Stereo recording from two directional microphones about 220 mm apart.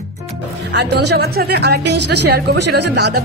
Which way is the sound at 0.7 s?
50° right (ahead or behind).